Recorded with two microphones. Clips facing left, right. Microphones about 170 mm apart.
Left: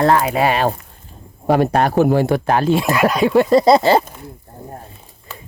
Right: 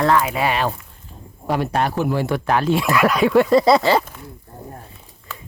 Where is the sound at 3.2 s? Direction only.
30° left (ahead or behind).